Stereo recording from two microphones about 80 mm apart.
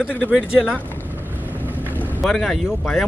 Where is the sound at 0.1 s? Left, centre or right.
Centre.